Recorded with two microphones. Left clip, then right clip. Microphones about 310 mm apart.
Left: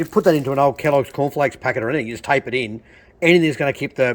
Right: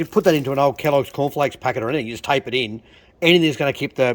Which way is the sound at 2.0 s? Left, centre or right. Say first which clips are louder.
Left 1 dB; right.